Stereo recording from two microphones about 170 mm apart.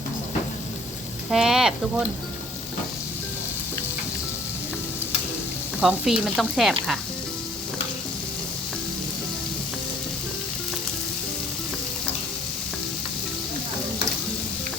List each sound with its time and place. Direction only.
1.3 s speech: centre (ahead or behind)
5.8 s speech: centre (ahead or behind)